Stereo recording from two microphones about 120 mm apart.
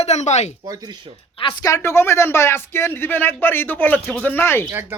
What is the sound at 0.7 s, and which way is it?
Speech, 30° right (ahead or behind).